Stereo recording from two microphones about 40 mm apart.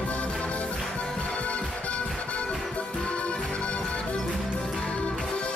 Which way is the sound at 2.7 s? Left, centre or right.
Left.